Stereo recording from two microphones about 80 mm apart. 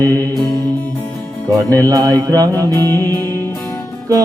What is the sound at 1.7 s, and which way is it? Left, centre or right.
Mantra, right.